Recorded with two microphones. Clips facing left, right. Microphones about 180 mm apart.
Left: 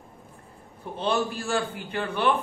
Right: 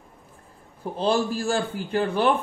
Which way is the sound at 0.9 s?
35° right (ahead or behind).